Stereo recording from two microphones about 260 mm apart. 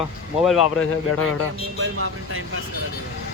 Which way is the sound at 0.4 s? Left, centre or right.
Centre.